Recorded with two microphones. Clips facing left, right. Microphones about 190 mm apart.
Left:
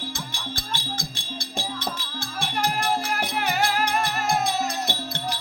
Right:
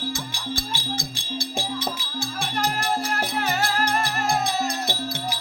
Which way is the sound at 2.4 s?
Centre (ahead or behind).